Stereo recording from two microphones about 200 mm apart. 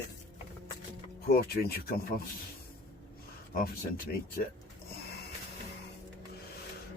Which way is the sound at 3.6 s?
45° left (ahead or behind).